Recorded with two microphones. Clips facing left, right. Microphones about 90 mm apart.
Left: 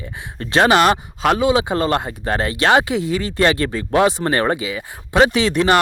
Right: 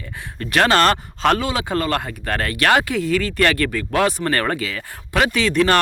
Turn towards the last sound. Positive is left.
turn(degrees=20)  # may be behind; listen again after turning